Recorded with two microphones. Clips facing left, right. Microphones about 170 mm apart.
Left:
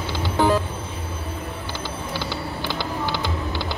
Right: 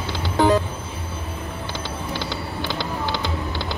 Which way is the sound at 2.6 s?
15° right (ahead or behind).